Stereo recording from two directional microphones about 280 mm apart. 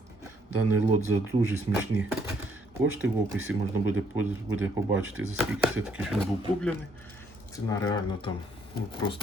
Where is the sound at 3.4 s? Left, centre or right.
Right.